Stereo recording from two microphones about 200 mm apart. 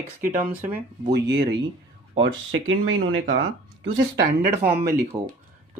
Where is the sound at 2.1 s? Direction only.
65° right (ahead or behind).